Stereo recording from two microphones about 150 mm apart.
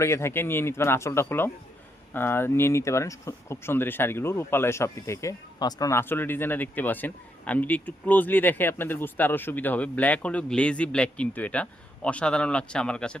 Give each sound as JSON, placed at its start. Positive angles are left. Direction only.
{"t": 0.0, "sound": "speech", "side_deg": 15}